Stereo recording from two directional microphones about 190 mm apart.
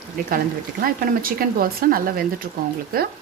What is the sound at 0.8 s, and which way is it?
Speech, 50° right (ahead or behind).